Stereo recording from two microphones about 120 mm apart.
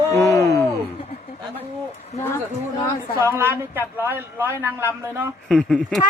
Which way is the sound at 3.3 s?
20° right (ahead or behind).